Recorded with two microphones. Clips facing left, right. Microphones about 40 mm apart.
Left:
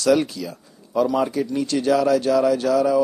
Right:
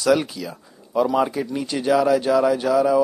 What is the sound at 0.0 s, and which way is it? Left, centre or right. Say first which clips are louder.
Speech: left 1 dB; centre.